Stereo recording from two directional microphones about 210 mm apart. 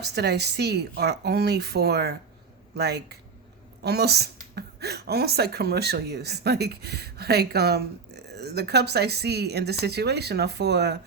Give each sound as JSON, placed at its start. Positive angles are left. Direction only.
{"t": 0.1, "sound": "a woman's voice", "side_deg": -50}